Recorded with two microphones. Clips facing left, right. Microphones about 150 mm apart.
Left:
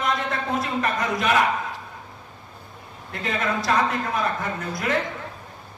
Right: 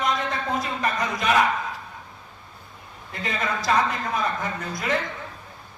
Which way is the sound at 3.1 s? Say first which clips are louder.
Left 2 dB; centre (ahead or behind).